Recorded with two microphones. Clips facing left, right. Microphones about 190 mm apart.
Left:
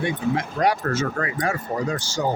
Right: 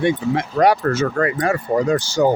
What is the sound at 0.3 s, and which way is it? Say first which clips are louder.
Speech: right 6 dB; 70° right (ahead or behind).